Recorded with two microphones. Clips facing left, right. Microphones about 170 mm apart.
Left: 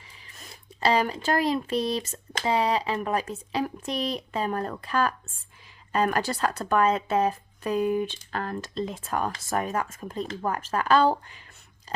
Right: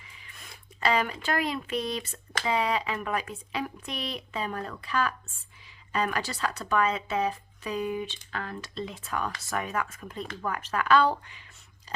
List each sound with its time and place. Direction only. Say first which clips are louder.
0.3 s speech: left 3 dB; 35° left (ahead or behind)
11.9 s biting: left 5 dB; 45° left (ahead or behind)